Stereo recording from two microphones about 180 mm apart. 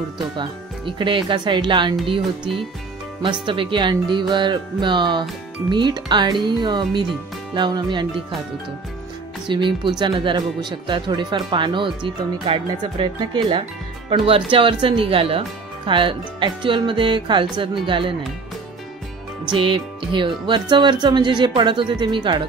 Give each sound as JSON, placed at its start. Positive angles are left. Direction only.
{"t": 0.4, "sound": "speech", "side_deg": -25}
{"t": 9.5, "sound": "speech", "side_deg": -25}
{"t": 19.4, "sound": "speech", "side_deg": -30}